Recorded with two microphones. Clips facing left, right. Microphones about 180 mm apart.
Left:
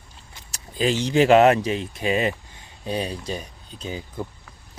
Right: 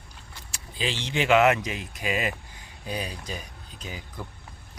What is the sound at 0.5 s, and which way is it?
Speech, 45° left (ahead or behind).